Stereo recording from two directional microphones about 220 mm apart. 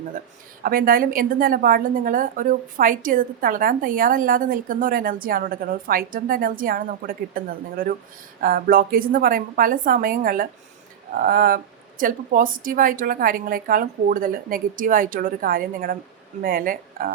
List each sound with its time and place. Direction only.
0.6 s a woman's voice: 40° right (ahead or behind)